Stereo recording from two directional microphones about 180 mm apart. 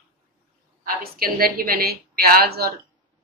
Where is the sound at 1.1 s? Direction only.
55° right (ahead or behind).